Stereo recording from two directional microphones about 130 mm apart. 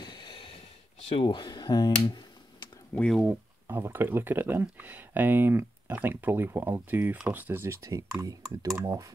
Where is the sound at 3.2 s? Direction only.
15° right (ahead or behind).